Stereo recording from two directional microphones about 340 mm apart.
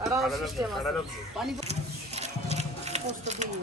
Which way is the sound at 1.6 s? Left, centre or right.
Centre.